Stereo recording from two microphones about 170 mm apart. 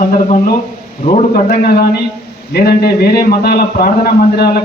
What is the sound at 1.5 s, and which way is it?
A man's voice, 65° left (ahead or behind).